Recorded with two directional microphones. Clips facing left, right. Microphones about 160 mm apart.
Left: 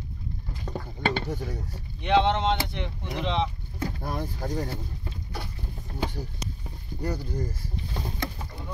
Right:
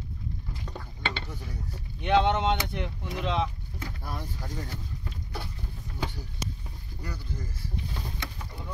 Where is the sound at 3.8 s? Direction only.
50° left (ahead or behind).